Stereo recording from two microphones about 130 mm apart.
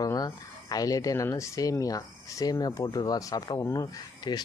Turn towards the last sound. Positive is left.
turn(degrees=30)  # may be behind; listen again after turning